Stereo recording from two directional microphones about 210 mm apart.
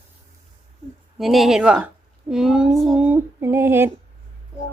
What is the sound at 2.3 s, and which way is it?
Female singing, centre (ahead or behind).